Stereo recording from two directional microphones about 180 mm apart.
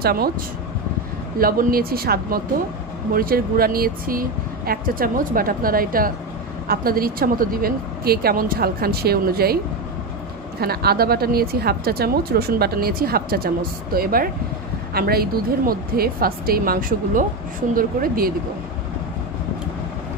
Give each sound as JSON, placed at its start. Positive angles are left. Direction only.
{"t": 0.0, "sound": "speech", "side_deg": -55}
{"t": 1.4, "sound": "speech", "side_deg": -55}
{"t": 10.6, "sound": "speech", "side_deg": -60}